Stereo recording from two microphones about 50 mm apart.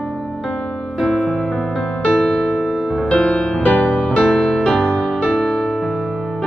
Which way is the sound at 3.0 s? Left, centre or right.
Left.